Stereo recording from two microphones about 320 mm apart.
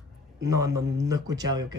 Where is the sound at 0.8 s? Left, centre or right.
Right.